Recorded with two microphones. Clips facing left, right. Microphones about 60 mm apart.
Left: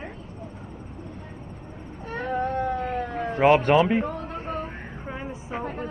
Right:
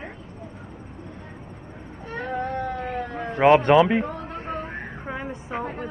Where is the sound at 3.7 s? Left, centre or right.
Right.